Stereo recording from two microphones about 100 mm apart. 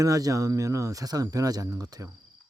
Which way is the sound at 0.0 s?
35° right (ahead or behind).